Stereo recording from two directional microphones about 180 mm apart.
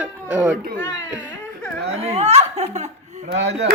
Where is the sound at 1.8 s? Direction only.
35° right (ahead or behind).